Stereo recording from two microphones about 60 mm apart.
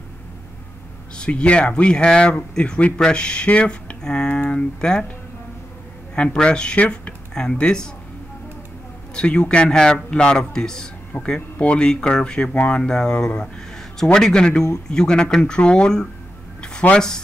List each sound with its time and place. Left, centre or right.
1.1 s speech: centre
6.1 s a man's voice: centre
9.1 s a man's voice: centre